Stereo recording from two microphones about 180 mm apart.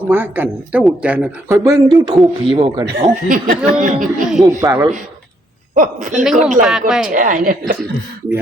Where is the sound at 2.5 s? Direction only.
25° right (ahead or behind).